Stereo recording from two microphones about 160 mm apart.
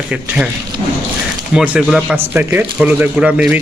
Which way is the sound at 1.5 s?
5° right (ahead or behind).